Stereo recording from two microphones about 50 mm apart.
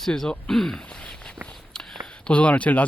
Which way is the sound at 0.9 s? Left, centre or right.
Left.